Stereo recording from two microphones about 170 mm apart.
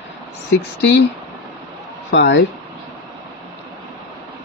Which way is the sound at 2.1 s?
90° left.